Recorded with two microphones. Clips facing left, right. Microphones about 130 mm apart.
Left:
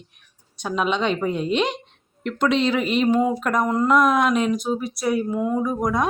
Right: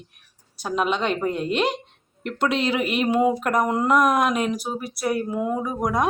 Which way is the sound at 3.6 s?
20° right (ahead or behind).